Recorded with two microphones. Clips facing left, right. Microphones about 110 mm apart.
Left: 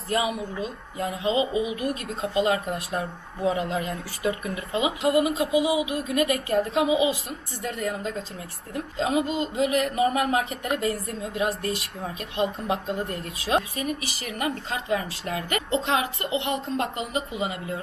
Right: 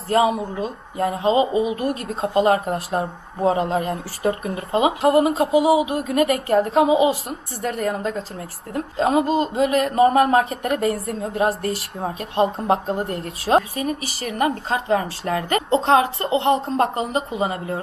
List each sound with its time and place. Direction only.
0.1 s speech: 35° right (ahead or behind)